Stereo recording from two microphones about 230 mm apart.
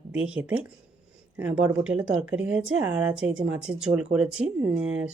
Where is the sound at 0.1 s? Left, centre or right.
Centre.